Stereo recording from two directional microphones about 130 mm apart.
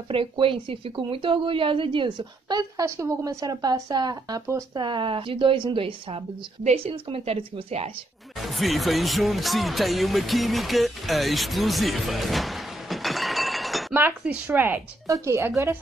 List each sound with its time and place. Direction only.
0.1 s a woman's voice: 45° right (ahead or behind)
2.8 s speech: 25° right (ahead or behind)
4.7 s a woman's voice: 40° right (ahead or behind)
8.4 s speech: centre (ahead or behind)
13.9 s speech: 10° right (ahead or behind)